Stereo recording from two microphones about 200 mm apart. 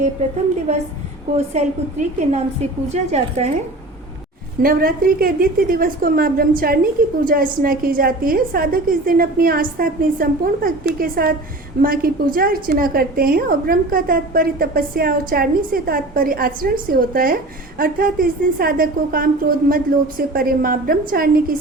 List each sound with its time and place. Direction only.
1.5 s a woman's voice: 35° right (ahead or behind)
4.6 s a woman's voice: 45° right (ahead or behind)